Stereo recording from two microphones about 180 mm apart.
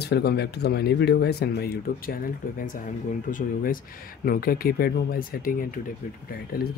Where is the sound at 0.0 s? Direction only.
65° left (ahead or behind).